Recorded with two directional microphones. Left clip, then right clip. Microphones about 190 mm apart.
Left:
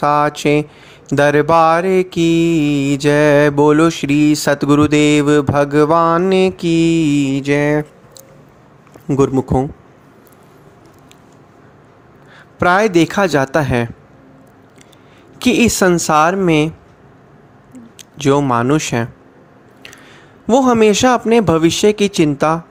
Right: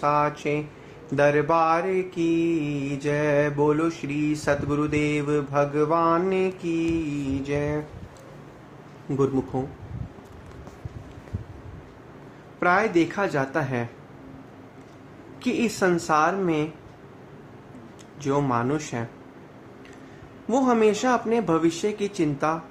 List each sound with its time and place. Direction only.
0.0 s speech: 55° left (ahead or behind)
1.0 s mantra: 55° left (ahead or behind)
9.0 s speech: 50° left (ahead or behind)
12.5 s speech: 55° left (ahead or behind)
15.4 s mantra: 55° left (ahead or behind)
17.9 s a man's voice: 50° left (ahead or behind)
20.5 s mantra: 50° left (ahead or behind)